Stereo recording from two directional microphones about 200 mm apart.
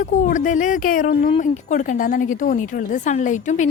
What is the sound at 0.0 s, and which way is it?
A woman's voice, 40° left (ahead or behind).